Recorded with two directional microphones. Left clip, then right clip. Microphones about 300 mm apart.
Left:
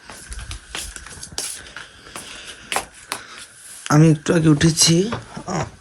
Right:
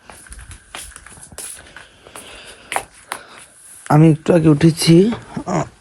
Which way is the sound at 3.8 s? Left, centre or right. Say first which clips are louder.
Right 3 dB; centre.